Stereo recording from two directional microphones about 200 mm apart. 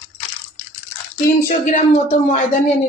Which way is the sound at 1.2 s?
40° left (ahead or behind).